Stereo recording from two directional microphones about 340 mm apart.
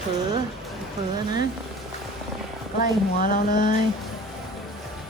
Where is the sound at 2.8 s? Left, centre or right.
Left.